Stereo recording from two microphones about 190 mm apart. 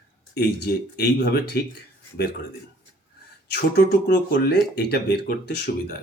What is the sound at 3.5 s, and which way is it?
Speech, 60° left (ahead or behind).